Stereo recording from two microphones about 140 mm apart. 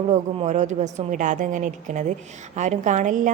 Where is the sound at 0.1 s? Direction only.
55° right (ahead or behind).